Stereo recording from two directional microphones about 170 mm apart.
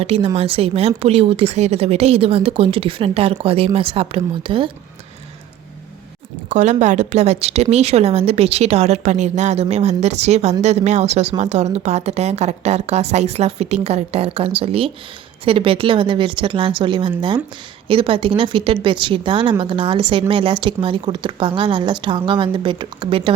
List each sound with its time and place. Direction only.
0.0 s speech: 35° right (ahead or behind)
6.5 s a woman's voice: 45° right (ahead or behind)